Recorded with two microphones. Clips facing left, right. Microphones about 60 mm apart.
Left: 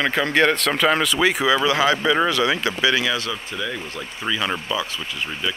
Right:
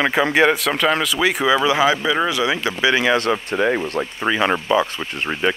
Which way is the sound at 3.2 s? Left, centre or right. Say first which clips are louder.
Right 8 dB; right.